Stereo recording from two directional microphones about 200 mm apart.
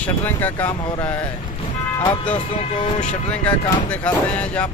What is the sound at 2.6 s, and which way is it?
Speech, 35° left (ahead or behind).